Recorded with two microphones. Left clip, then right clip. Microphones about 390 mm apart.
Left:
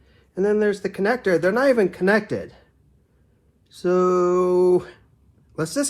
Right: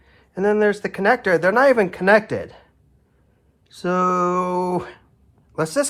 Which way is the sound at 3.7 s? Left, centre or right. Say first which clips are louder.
Even; right.